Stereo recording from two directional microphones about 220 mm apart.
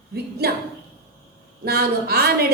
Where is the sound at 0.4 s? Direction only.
45° right (ahead or behind).